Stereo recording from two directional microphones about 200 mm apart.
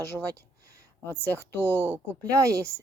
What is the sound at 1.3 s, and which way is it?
Speech, 10° left (ahead or behind).